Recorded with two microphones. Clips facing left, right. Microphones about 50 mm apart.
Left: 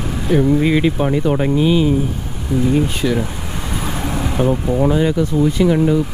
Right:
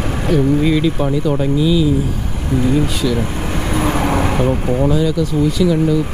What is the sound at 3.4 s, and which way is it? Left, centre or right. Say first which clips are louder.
Vehicle: right 6 dB; right.